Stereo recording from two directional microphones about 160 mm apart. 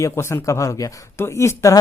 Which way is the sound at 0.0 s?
15° left (ahead or behind).